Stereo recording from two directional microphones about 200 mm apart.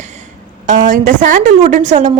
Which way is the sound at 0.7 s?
40° right (ahead or behind).